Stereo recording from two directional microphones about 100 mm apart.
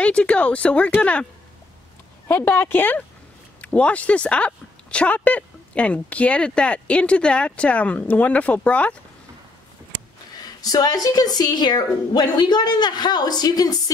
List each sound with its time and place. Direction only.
0.0 s speech: 10° left (ahead or behind)
2.2 s speech: 20° left (ahead or behind)
10.4 s a woman's voice: 40° left (ahead or behind)